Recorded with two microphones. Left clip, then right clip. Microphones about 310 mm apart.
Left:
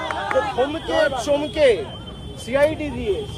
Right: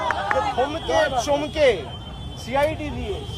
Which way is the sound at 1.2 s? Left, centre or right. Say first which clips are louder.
Left 2 dB; centre.